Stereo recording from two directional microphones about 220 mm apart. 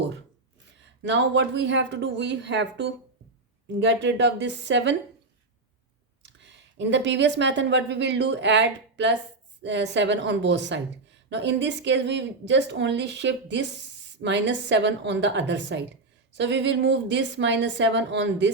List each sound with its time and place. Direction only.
1.0 s speech: 55° right (ahead or behind)
6.2 s speech: 55° right (ahead or behind)